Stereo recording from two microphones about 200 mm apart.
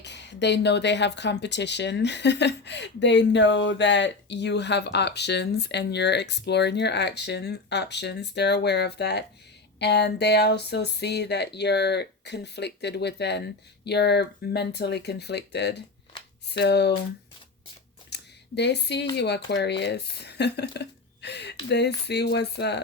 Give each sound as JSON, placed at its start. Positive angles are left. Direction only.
{"t": 0.0, "sound": "speech", "side_deg": 60}
{"t": 18.1, "sound": "a sound", "side_deg": 55}
{"t": 19.1, "sound": "speech", "side_deg": 55}